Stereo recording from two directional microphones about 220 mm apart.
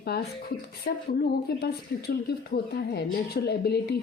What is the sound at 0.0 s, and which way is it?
Speech, 45° left (ahead or behind).